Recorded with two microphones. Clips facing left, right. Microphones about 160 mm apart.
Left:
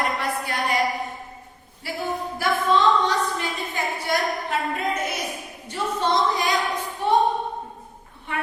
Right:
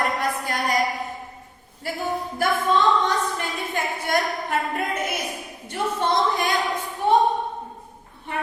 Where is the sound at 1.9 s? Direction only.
45° right (ahead or behind).